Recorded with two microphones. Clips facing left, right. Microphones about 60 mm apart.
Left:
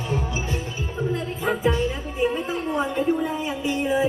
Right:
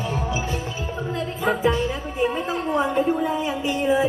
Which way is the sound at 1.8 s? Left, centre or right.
Right.